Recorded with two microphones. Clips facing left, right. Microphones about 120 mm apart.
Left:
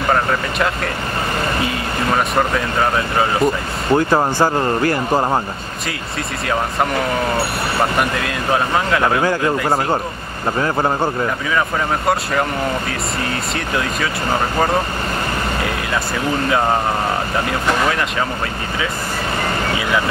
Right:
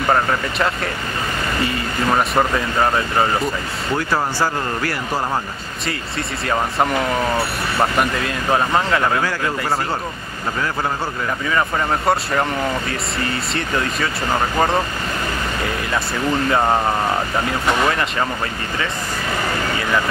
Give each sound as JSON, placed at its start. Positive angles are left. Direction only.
{"t": 2.1, "sound": "speech", "side_deg": 0}
{"t": 3.9, "sound": "speech", "side_deg": 25}
{"t": 6.4, "sound": "speech", "side_deg": 0}
{"t": 8.0, "sound": "speech", "side_deg": 0}
{"t": 9.2, "sound": "speech", "side_deg": 20}
{"t": 13.6, "sound": "speech", "side_deg": 0}